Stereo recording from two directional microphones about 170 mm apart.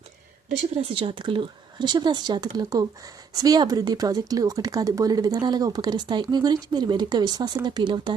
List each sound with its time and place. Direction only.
0.8 s speech: 35° right (ahead or behind)